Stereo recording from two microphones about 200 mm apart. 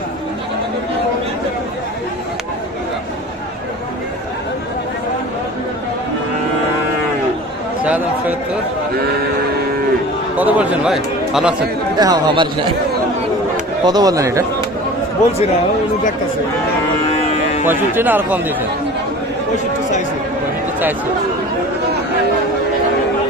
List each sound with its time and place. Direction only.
7.9 s a sound: 5° right (ahead or behind)
10.3 s speech: 10° right (ahead or behind)
11.9 s speech: 20° right (ahead or behind)
13.8 s speech: 20° right (ahead or behind)
17.7 s speech: 10° right (ahead or behind)